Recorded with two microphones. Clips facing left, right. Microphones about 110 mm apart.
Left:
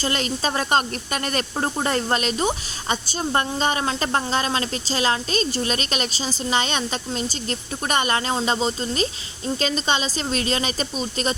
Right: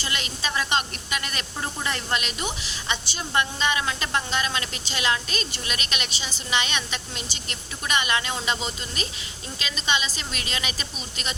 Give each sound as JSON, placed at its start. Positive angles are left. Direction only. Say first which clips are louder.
{"t": 0.0, "sound": "a woman's voice", "louder": "left 7 dB", "side_deg": 40}